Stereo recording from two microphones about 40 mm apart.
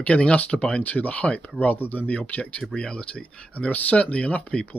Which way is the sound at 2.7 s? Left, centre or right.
Left.